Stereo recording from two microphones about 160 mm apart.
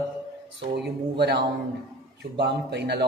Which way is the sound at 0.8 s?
90° right.